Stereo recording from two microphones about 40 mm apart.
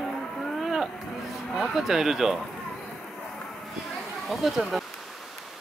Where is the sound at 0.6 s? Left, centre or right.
Centre.